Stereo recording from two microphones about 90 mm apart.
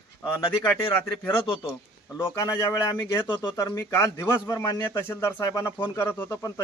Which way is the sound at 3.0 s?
25° left (ahead or behind).